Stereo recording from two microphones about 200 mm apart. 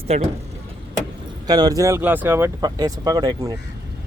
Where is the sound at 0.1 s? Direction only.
30° right (ahead or behind).